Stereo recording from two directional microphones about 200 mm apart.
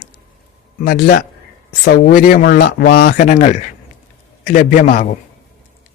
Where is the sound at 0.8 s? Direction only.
45° left (ahead or behind).